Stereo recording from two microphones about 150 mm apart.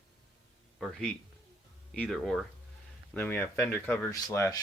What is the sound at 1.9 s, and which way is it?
Speech, 5° left (ahead or behind).